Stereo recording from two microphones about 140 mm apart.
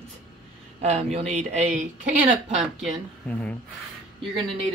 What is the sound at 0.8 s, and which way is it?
Speech, 50° right (ahead or behind).